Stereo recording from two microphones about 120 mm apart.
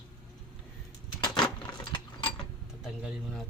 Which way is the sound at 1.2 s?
35° left (ahead or behind).